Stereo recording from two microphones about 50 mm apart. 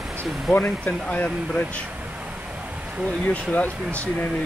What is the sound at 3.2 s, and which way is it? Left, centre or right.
Speech, left.